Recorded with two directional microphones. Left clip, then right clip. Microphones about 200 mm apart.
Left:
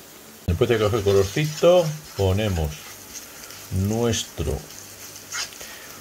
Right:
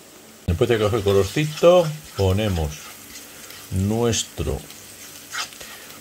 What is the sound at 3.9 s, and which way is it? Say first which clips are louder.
Speech: right 2 dB; 20° right (ahead or behind).